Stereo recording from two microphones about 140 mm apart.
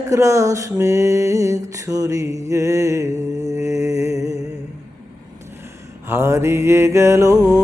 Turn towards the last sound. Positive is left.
turn(degrees=-20)  # may be behind; listen again after turning